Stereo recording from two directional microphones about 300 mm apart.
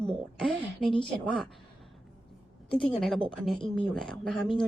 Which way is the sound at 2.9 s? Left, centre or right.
Centre.